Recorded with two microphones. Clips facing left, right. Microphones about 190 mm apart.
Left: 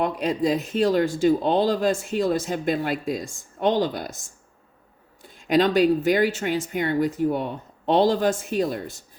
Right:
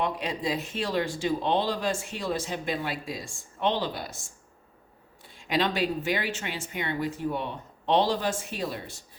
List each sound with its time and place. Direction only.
0.0 s speech: 40° left (ahead or behind)
5.4 s speech: 40° left (ahead or behind)